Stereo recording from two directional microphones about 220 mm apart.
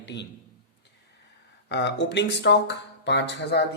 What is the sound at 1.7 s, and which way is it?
Speech, 50° left (ahead or behind).